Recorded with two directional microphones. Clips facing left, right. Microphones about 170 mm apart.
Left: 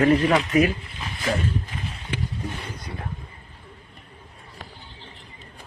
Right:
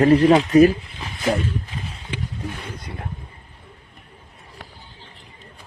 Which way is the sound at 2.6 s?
25° right (ahead or behind).